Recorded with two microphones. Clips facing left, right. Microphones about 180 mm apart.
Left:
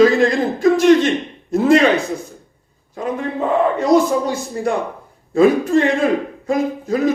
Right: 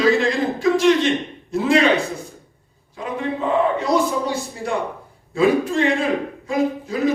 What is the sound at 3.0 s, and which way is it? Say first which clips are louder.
A man's voice: left 3 dB; 45° left (ahead or behind).